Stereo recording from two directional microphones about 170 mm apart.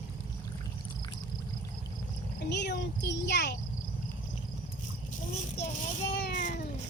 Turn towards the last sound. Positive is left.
turn(degrees=70)  # may be behind; listen again after turning